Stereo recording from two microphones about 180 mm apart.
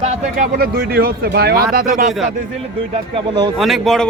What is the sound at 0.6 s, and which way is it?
Speech, 60° right (ahead or behind).